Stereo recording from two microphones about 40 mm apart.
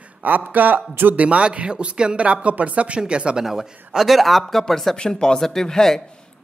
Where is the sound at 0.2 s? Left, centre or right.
Right.